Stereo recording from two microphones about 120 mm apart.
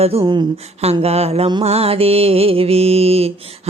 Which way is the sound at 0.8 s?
60° right (ahead or behind).